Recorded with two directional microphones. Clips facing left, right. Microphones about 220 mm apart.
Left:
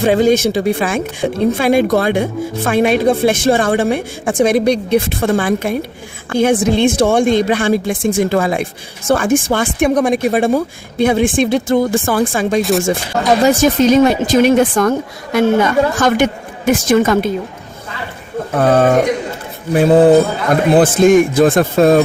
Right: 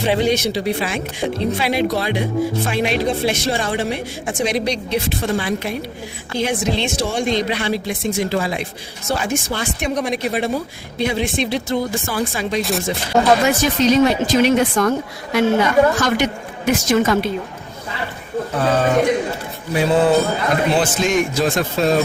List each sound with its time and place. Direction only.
0.0 s speech: 45° left (ahead or behind)
18.5 s speech: 55° left (ahead or behind)